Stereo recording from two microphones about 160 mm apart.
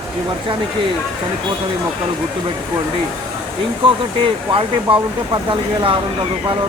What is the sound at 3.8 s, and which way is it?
Speech, 30° right (ahead or behind).